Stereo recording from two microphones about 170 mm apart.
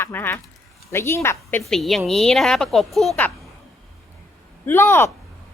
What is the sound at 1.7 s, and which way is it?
A woman's voice, centre (ahead or behind).